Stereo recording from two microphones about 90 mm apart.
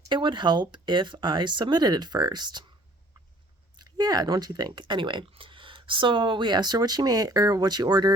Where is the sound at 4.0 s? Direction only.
45° right (ahead or behind).